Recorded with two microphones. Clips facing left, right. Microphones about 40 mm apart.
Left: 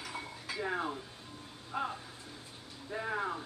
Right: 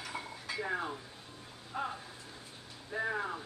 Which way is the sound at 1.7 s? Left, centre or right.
Centre.